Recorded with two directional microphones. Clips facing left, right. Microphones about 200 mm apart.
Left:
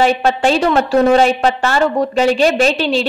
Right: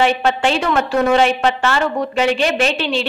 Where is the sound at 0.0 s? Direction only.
40° left (ahead or behind).